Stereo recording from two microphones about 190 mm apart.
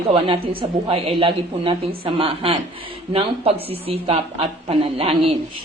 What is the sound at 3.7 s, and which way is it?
A man's voice, 30° right (ahead or behind).